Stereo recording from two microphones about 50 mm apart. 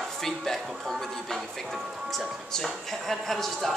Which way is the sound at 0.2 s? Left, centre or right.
Centre.